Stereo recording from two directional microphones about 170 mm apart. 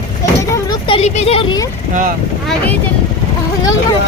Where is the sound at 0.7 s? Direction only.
30° left (ahead or behind).